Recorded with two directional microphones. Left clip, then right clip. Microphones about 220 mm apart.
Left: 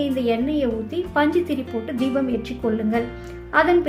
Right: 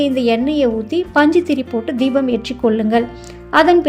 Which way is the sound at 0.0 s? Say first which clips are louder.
Right 6 dB; 35° right (ahead or behind).